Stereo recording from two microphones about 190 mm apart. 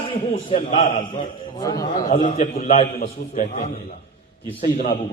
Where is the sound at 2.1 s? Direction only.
35° left (ahead or behind).